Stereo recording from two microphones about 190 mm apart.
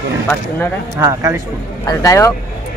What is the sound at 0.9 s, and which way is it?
Speech, 15° right (ahead or behind).